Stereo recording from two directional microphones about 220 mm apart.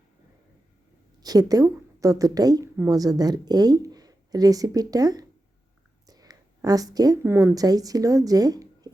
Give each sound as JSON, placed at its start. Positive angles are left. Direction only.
{"t": 1.2, "sound": "a woman's voice", "side_deg": -15}